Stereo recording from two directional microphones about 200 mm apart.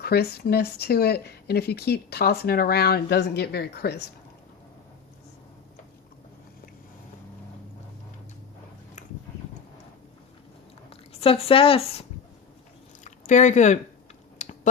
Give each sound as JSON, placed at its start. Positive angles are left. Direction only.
{"t": 0.0, "sound": "speech", "side_deg": 50}
{"t": 10.8, "sound": "speech", "side_deg": 30}
{"t": 13.1, "sound": "speech", "side_deg": 35}
{"t": 14.3, "sound": "typing", "side_deg": 40}